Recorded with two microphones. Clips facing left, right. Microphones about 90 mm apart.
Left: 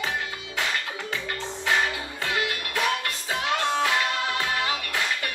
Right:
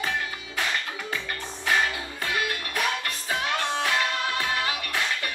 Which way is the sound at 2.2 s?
20° left (ahead or behind).